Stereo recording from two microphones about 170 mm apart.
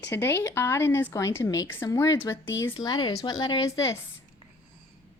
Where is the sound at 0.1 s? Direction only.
15° left (ahead or behind).